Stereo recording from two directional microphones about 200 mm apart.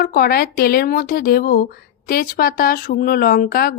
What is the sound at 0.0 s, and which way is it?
A woman's voice, 50° left (ahead or behind).